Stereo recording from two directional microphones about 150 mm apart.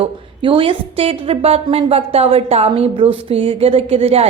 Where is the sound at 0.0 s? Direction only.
35° right (ahead or behind).